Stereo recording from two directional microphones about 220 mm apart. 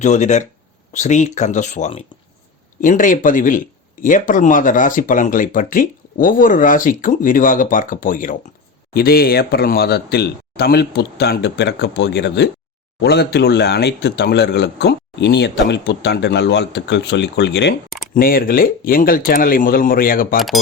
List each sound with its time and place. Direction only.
0.0 s speech: 30° left (ahead or behind); by 17.7 s 50° left (ahead or behind)
17.8 s a sound: centre (ahead or behind)
18.1 s speech: 40° left (ahead or behind)